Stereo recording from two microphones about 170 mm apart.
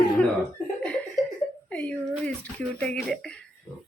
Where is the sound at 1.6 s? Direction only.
10° left (ahead or behind).